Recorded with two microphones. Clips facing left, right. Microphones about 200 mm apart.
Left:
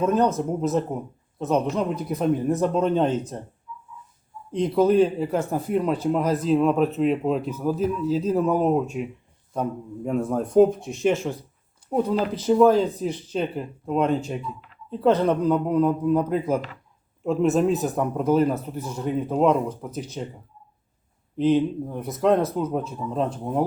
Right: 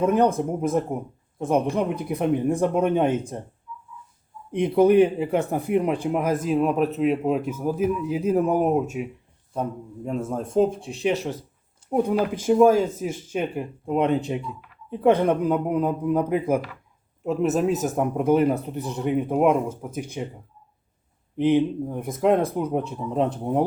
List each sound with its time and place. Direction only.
0.0 s speech: 15° right (ahead or behind)
0.3 s speech: 55° right (ahead or behind)
0.7 s speech: 10° right (ahead or behind)
4.6 s speech: 15° right (ahead or behind)
9.6 s a man's voice: 5° left (ahead or behind)
10.9 s speech: 40° right (ahead or behind)
11.9 s speech: 15° right (ahead or behind)
17.7 s speech: 45° right (ahead or behind)
17.9 s speech: 10° right (ahead or behind)
21.3 s speech: 15° right (ahead or behind)